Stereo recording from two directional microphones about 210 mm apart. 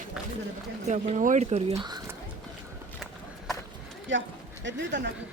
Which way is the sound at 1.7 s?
20° right (ahead or behind).